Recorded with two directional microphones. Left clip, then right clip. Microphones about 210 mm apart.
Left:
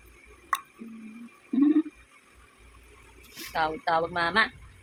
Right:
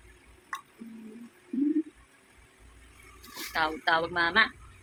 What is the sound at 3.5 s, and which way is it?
A woman's voice, 10° left (ahead or behind).